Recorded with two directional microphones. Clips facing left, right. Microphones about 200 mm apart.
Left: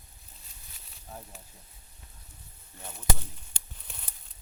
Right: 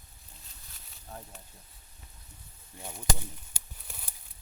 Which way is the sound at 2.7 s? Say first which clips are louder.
Right 2 dB; 15° right (ahead or behind).